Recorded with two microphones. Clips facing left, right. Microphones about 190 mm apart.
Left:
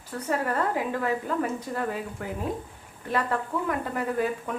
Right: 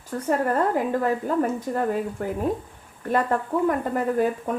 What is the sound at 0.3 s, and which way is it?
A woman's voice, 45° right (ahead or behind).